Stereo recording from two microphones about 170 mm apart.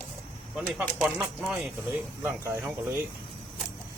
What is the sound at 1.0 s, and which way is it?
Speech, 5° right (ahead or behind).